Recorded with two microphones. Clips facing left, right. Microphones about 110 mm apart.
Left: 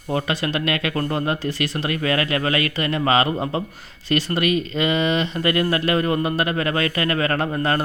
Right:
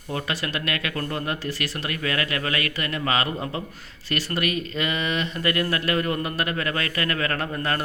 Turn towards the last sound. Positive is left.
turn(degrees=30)  # may be behind; listen again after turning